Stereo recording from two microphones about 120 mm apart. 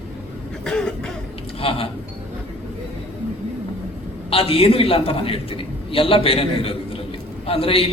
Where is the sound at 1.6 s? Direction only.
50° left (ahead or behind).